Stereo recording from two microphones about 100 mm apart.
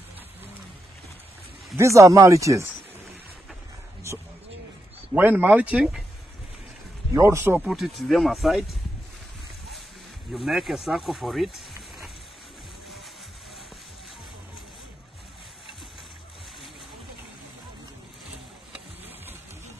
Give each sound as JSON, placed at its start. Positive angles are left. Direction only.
{"t": 1.8, "sound": "speech", "side_deg": -30}
{"t": 5.1, "sound": "speech", "side_deg": -15}
{"t": 7.2, "sound": "speech", "side_deg": -30}
{"t": 7.6, "sound": "speech", "side_deg": 0}
{"t": 10.3, "sound": "speech", "side_deg": 0}